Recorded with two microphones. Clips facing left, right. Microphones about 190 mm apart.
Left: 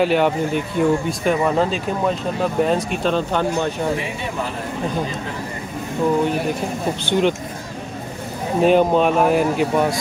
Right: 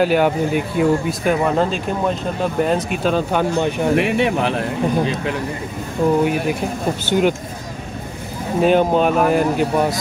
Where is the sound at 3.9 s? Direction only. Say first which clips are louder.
Right 8 dB; 70° right (ahead or behind).